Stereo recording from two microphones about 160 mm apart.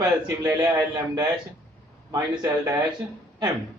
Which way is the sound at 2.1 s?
15° right (ahead or behind).